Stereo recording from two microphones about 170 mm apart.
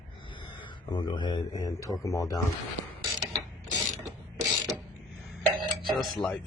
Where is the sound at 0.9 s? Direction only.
25° left (ahead or behind).